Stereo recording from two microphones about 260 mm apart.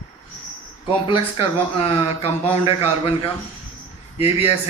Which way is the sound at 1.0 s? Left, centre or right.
Left.